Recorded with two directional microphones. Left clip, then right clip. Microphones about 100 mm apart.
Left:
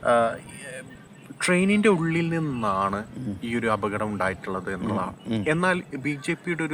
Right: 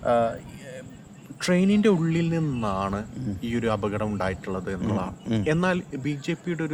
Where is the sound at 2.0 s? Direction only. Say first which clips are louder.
Left 1 dB; 10° right (ahead or behind).